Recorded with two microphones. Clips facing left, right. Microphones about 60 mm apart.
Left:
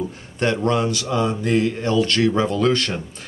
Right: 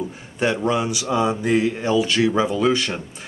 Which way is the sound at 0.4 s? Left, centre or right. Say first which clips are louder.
Left 1 dB; centre.